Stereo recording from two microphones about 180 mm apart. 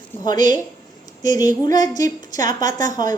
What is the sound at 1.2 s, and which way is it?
A woman's voice, 20° left (ahead or behind).